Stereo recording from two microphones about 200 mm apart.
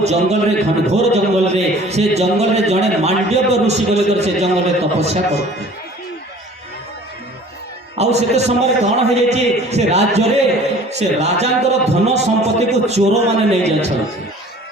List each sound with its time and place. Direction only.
0.0 s a man's voice: 35° right (ahead or behind)
7.9 s a man's voice: 35° right (ahead or behind)